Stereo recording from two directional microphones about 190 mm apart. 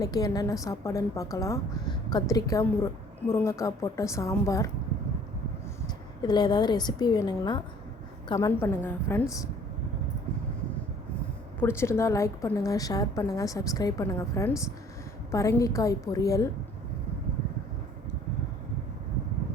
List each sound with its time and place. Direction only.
0.0 s a woman's voice: 20° left (ahead or behind)
6.2 s a woman's voice: 20° left (ahead or behind)
11.6 s a woman's voice: 15° left (ahead or behind)